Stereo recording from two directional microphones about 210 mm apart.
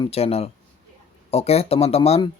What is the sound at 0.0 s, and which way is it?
Speech, 30° left (ahead or behind).